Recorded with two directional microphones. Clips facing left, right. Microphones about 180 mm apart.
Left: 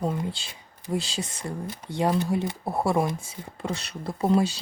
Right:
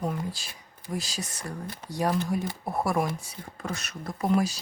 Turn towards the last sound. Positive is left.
turn(degrees=30)  # may be behind; listen again after turning